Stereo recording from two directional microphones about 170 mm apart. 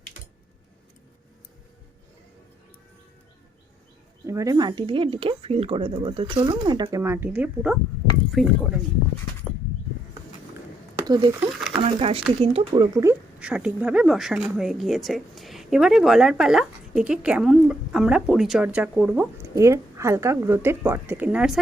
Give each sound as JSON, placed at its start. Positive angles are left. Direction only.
{"t": 4.3, "sound": "speech", "side_deg": -20}
{"t": 11.0, "sound": "speech", "side_deg": -25}
{"t": 11.8, "sound": "speech", "side_deg": -35}
{"t": 12.9, "sound": "speech", "side_deg": -15}
{"t": 13.4, "sound": "speech", "side_deg": -5}